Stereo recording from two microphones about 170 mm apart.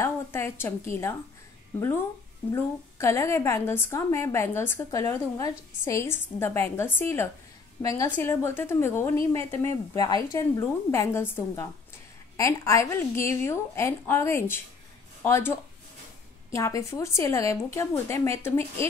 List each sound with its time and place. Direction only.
0.0 s a woman's voice: 15° left (ahead or behind)
7.8 s a woman's voice: 30° left (ahead or behind)
8.2 s a woman's voice: 15° left (ahead or behind)